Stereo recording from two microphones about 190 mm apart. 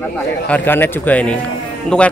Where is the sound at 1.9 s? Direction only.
5° left (ahead or behind).